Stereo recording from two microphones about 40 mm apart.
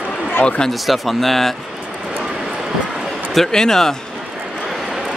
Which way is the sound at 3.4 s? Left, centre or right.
Centre.